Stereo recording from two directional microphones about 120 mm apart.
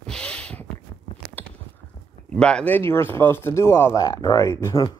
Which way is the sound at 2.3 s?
5° left (ahead or behind).